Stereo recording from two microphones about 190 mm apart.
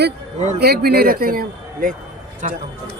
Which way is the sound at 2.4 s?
40° right (ahead or behind).